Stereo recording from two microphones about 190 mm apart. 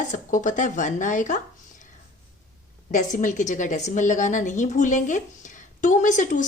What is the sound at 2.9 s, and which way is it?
A woman's voice, 40° left (ahead or behind).